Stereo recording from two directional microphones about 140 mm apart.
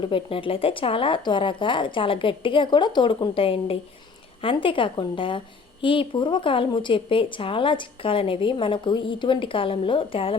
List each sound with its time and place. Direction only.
0.0 s a woman's voice: 40° left (ahead or behind)